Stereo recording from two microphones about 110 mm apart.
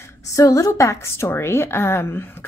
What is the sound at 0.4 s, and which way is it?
A woman's voice, 30° left (ahead or behind).